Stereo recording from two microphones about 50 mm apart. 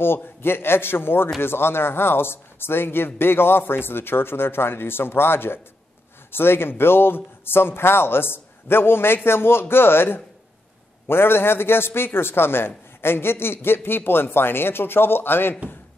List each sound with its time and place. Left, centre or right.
0.0 s a man's voice: left